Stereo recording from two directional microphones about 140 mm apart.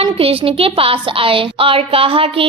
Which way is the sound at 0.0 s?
40° right (ahead or behind).